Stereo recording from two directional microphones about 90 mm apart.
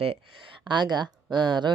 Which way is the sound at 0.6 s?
60° right (ahead or behind).